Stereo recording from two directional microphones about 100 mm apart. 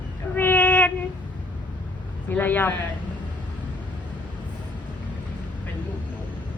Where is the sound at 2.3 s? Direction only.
20° left (ahead or behind).